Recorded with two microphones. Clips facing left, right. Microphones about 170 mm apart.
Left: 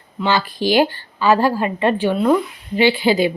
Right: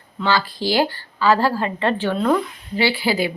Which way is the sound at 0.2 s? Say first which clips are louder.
Left 2 dB; 15° left (ahead or behind).